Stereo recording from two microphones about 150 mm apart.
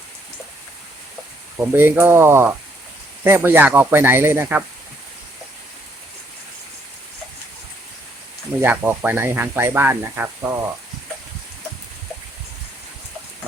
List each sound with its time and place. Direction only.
1.5 s speech: 15° right (ahead or behind)
8.6 s speech: 15° right (ahead or behind)